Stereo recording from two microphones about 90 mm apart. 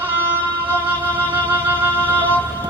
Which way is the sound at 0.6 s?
20° right (ahead or behind).